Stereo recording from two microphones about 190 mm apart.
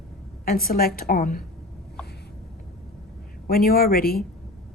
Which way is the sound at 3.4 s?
50° left (ahead or behind).